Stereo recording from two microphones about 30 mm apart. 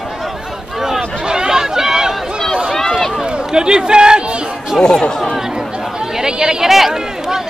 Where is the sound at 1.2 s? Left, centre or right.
Right.